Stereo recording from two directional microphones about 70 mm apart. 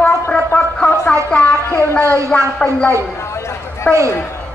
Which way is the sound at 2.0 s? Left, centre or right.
Right.